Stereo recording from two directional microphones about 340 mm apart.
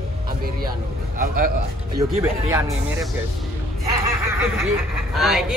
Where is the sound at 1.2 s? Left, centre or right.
Right.